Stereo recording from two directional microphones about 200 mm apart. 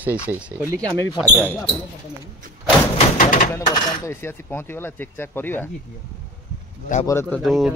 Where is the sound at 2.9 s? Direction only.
45° left (ahead or behind).